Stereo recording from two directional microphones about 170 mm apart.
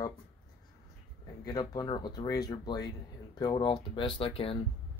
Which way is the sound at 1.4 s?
25° left (ahead or behind).